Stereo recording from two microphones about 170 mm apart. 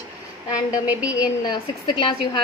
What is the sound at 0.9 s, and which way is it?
Speech, 5° right (ahead or behind).